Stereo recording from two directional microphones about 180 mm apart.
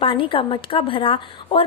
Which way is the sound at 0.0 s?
30° left (ahead or behind).